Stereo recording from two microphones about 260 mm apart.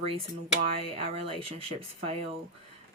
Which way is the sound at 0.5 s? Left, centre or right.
Right.